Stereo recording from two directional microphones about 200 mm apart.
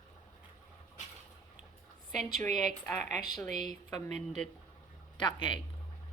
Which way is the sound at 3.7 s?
35° right (ahead or behind).